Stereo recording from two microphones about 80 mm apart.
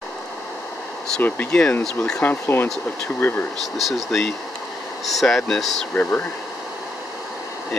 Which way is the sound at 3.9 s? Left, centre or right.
Centre.